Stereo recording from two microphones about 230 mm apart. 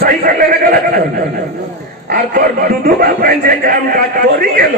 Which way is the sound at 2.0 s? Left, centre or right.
Right.